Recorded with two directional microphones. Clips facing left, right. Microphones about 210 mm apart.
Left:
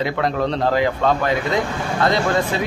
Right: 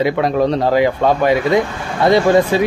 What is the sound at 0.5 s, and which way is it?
Speech, 20° right (ahead or behind).